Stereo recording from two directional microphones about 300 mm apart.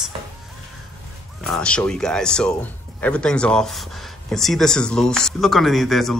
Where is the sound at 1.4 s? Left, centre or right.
Centre.